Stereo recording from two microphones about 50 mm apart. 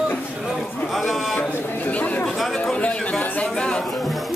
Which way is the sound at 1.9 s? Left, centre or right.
Left.